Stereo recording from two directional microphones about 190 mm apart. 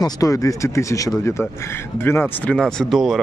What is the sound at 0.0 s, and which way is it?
Speech, 20° left (ahead or behind).